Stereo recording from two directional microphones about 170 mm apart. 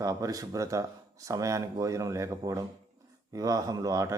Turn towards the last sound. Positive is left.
turn(degrees=-20)  # may be behind; listen again after turning